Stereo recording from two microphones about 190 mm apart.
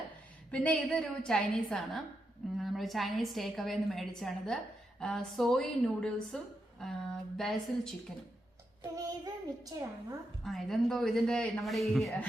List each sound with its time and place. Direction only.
0.5 s a woman's voice: 5° left (ahead or behind)
9.0 s a child's voice: 20° right (ahead or behind)
10.4 s a woman's voice: centre (ahead or behind)